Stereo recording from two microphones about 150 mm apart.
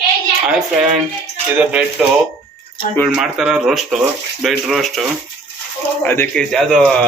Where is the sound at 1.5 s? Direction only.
10° right (ahead or behind).